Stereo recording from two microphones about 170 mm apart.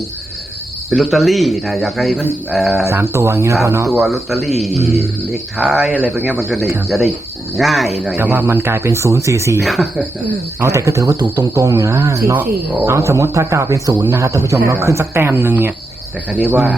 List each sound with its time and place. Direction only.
0.9 s speech: centre (ahead or behind)
2.8 s a man's voice: 15° right (ahead or behind)
4.0 s speech: centre (ahead or behind)
5.5 s a man's voice: 5° right (ahead or behind)
6.8 s speech: centre (ahead or behind)
8.0 s a man's voice: 10° right (ahead or behind)
9.6 s speech: centre (ahead or behind)
10.6 s a man's voice: 20° right (ahead or behind)